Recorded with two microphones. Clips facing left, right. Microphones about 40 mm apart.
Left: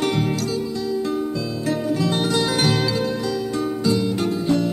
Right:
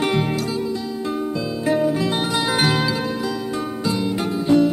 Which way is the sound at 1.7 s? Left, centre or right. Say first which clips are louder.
Right 3 dB; centre.